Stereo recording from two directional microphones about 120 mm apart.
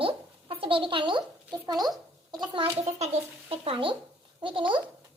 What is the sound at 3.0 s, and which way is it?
A woman's voice, 60° right (ahead or behind).